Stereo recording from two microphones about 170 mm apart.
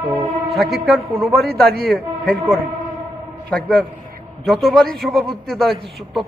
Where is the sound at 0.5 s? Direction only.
Centre (ahead or behind).